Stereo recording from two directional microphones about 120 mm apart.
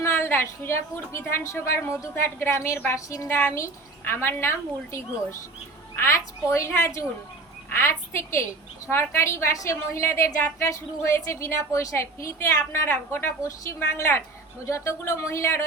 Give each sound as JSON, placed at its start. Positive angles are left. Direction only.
{"t": 0.0, "sound": "a woman's voice", "side_deg": 20}